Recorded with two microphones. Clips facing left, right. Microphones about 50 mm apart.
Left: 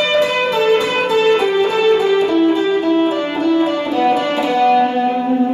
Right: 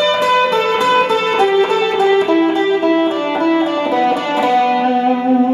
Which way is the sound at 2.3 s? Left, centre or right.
Right.